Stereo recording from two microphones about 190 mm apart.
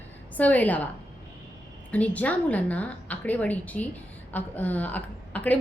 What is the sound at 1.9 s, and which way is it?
A woman's voice, 10° left (ahead or behind).